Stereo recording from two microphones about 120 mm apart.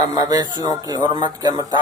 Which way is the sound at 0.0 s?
35° right (ahead or behind).